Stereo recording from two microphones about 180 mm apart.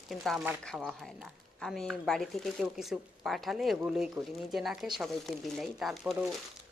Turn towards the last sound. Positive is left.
turn(degrees=0)  # may be behind; listen again after turning